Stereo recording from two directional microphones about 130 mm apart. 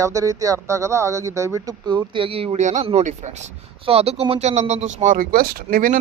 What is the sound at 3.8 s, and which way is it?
A man's voice, 50° right (ahead or behind).